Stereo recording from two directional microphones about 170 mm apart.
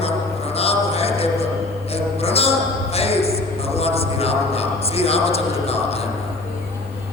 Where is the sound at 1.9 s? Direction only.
35° left (ahead or behind).